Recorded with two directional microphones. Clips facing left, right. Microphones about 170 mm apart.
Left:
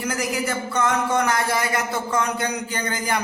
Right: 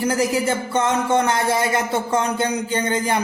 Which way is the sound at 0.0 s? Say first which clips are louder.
Right 6 dB; 30° right (ahead or behind).